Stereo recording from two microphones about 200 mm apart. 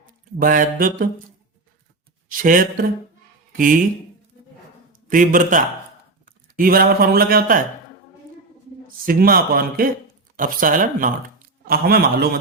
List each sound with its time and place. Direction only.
0.0 s mantra: 45° right (ahead or behind)
2.3 s speech: 45° right (ahead or behind)
4.9 s a man's voice: 40° right (ahead or behind)
9.0 s speech: 50° right (ahead or behind)